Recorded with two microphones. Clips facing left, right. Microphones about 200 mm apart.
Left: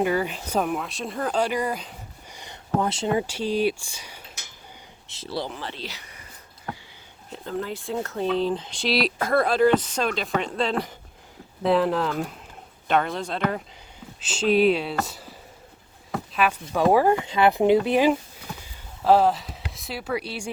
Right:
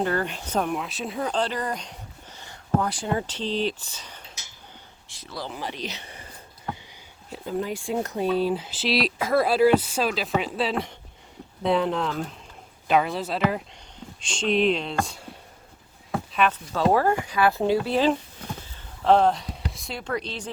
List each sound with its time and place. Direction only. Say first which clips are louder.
0.0 s speech: left 2 dB; 10° left (ahead or behind)
1.4 s speech: left 5 dB; 10° left (ahead or behind)
2.4 s speech: even; 20° left (ahead or behind)
5.0 s speech: left 6 dB; 25° left (ahead or behind)
5.5 s speech: right 2 dB; 15° right (ahead or behind); by 6.2 s 30° right (ahead or behind)
7.3 s speech: right 2 dB; 10° right (ahead or behind)
16.1 s a sound: right 1 dB; centre (ahead or behind)
16.5 s speech: left 4 dB; 15° left (ahead or behind)